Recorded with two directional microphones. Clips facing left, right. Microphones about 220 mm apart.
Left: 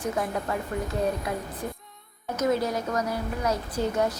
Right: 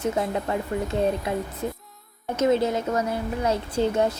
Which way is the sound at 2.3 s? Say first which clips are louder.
Right 4 dB; 25° right (ahead or behind).